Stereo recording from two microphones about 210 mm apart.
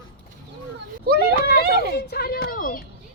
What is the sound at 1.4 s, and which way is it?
A child's voice, 50° left (ahead or behind).